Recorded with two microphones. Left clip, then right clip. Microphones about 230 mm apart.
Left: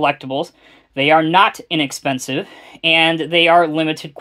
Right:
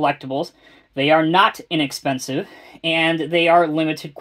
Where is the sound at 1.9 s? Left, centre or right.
Left.